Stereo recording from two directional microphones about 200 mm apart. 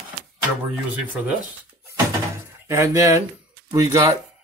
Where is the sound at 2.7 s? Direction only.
15° right (ahead or behind).